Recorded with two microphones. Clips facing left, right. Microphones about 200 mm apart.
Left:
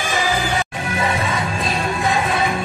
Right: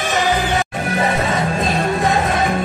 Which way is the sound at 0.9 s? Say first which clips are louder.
Right 3 dB; 45° right (ahead or behind).